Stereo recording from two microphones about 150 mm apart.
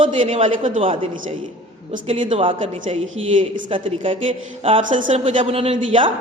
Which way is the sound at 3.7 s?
35° right (ahead or behind).